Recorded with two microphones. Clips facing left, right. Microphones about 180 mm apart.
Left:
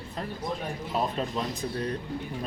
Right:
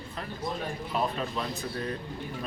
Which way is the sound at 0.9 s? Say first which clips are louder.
Left 2 dB; 40° left (ahead or behind).